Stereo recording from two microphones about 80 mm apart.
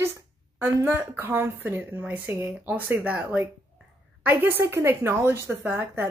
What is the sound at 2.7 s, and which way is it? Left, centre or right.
A woman's voice, right.